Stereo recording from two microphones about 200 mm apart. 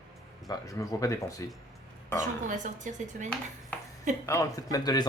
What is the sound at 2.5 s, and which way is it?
Speech, 40° right (ahead or behind).